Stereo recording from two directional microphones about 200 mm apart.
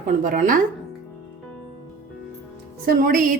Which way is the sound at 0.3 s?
40° right (ahead or behind).